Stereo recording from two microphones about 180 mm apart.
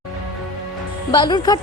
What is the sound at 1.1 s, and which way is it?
Speech, 25° left (ahead or behind).